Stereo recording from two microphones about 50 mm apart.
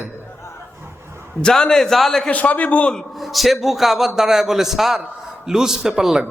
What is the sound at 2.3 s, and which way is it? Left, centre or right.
Speech, left.